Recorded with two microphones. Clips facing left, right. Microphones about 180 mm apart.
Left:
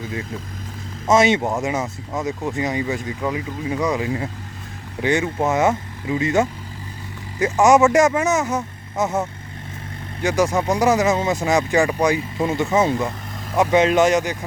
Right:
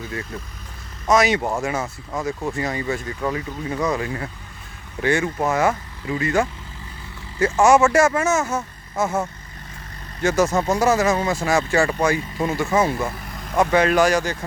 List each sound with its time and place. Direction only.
1.0 s speech: 25° left (ahead or behind)
10.2 s speech: 15° left (ahead or behind)
13.1 s vehicle: centre (ahead or behind)
13.6 s speech: 15° left (ahead or behind)